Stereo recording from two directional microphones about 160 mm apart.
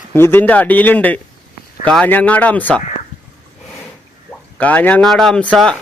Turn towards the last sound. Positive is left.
turn(degrees=0)  # may be behind; listen again after turning